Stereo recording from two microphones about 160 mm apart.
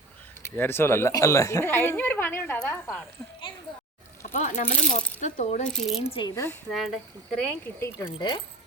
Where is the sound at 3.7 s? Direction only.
30° left (ahead or behind).